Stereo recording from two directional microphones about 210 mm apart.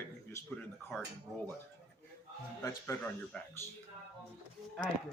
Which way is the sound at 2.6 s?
15° left (ahead or behind).